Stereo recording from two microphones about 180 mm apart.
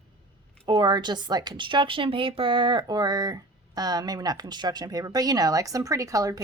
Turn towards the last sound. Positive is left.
turn(degrees=-20)  # may be behind; listen again after turning